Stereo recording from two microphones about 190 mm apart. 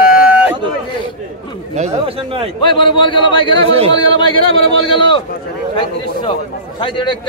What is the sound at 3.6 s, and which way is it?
Speech, 30° right (ahead or behind).